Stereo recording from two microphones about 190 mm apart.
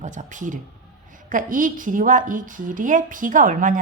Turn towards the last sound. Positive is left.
turn(degrees=-45)  # may be behind; listen again after turning